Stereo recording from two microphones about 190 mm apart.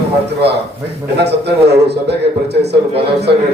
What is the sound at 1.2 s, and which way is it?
A man's voice, 60° right (ahead or behind).